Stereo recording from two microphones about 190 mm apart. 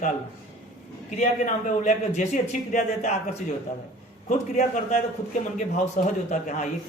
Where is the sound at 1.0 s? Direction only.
40° left (ahead or behind).